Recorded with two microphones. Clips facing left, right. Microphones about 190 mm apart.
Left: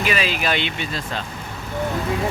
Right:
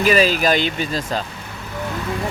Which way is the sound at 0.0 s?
40° right (ahead or behind).